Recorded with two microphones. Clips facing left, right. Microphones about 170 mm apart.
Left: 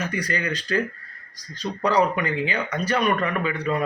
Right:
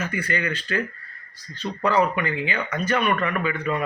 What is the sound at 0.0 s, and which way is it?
Speech, 35° left (ahead or behind).